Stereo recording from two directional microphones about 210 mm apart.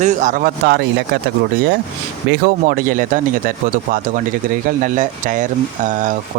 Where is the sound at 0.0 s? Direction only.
35° right (ahead or behind).